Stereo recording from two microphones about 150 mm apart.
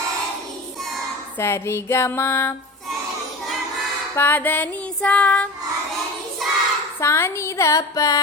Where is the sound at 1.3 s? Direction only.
15° left (ahead or behind).